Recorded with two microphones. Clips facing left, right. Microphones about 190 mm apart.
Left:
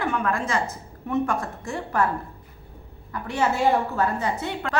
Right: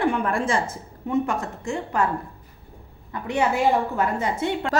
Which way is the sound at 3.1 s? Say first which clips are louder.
Right 2 dB; 20° right (ahead or behind).